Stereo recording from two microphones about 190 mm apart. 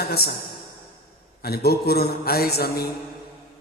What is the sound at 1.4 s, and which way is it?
A man's voice, 55° left (ahead or behind).